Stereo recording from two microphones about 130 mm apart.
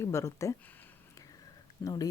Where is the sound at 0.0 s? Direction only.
20° left (ahead or behind).